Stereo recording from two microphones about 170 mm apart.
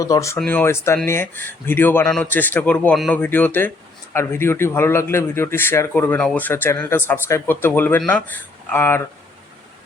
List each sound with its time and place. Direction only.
0.0 s speech: 20° left (ahead or behind)